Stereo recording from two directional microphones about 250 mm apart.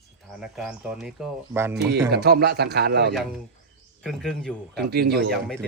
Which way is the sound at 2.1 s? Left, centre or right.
Right.